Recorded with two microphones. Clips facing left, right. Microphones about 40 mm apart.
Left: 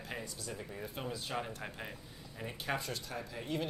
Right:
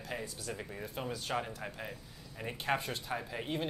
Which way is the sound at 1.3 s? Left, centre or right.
Right.